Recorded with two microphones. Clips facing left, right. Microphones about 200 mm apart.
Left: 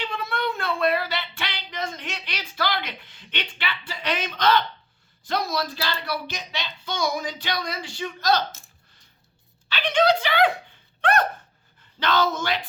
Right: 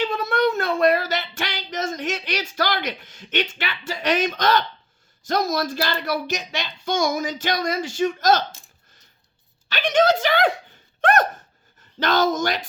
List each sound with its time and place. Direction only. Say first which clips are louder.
0.0 s speech: right 8 dB; 45° right (ahead or behind)
9.6 s speech: right 2 dB; 45° right (ahead or behind)